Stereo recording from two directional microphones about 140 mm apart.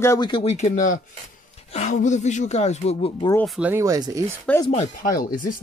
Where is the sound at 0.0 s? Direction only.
20° left (ahead or behind).